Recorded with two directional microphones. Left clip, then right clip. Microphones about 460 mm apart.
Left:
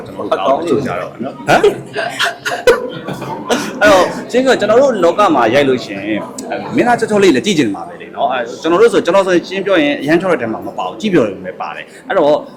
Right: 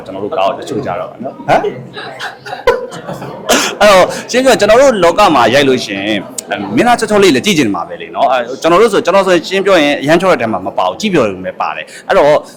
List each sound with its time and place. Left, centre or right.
0.3 s a man's voice: centre
3.4 s cough: right
4.3 s a man's voice: centre